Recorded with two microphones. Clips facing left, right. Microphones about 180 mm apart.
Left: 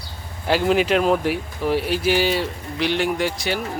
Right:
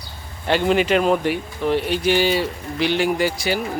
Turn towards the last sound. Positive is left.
turn(degrees=0)  # may be behind; listen again after turning